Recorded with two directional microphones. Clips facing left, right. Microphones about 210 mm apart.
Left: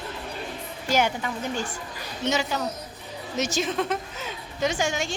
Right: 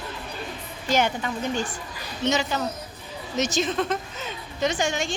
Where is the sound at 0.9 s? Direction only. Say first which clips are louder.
Right 1 dB; 10° left (ahead or behind).